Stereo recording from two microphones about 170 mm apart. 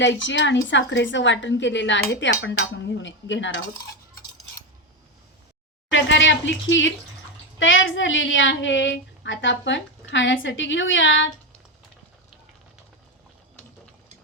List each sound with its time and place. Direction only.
0.0 s a woman's voice: 90° left
5.9 s a woman's voice: 90° left